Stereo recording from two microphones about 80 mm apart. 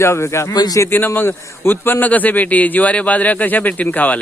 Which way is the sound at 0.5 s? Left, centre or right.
Left.